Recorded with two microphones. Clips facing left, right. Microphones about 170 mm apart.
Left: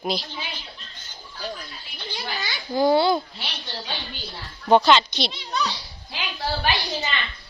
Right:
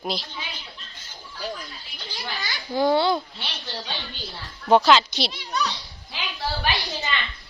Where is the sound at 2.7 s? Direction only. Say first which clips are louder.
Left 2 dB; 5° left (ahead or behind).